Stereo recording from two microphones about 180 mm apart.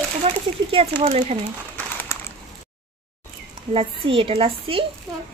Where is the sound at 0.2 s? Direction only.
35° right (ahead or behind).